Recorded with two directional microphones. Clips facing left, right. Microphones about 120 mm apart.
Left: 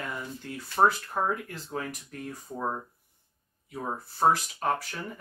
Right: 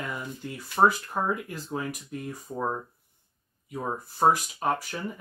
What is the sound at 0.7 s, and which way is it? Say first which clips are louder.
Speech: right 1 dB; 10° right (ahead or behind).